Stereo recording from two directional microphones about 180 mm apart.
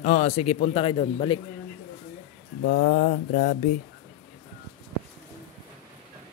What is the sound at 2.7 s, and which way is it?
Mantra, 60° left (ahead or behind).